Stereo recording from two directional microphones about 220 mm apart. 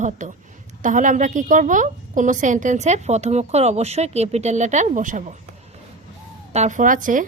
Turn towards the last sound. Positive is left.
turn(degrees=-35)  # may be behind; listen again after turning